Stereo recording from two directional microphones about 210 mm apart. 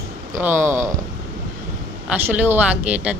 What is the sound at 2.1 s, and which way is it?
Speech, 10° right (ahead or behind).